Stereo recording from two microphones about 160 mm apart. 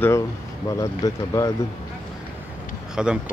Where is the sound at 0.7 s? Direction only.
20° left (ahead or behind).